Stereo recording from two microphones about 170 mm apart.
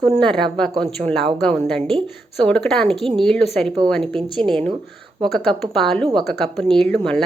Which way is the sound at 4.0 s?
30° right (ahead or behind).